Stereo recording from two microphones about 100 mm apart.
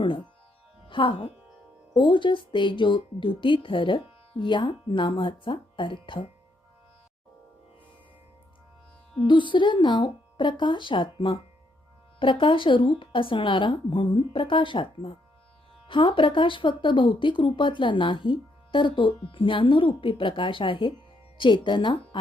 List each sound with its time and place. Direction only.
0.9 s speech: 55° left (ahead or behind)
9.2 s a woman's voice: 55° left (ahead or behind)